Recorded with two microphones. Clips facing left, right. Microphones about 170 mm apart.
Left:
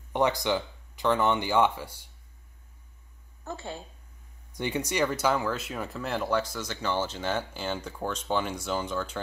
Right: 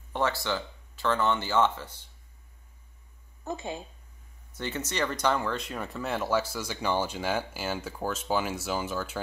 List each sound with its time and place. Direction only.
0.1 s speech: 15° left (ahead or behind)
3.4 s speech: 15° right (ahead or behind)
4.5 s speech: 15° left (ahead or behind); by 9.2 s 5° right (ahead or behind)